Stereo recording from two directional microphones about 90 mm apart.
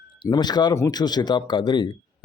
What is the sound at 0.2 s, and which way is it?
Speech, 50° left (ahead or behind).